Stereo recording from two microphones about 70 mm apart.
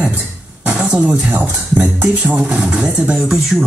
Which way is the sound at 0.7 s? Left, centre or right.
Right.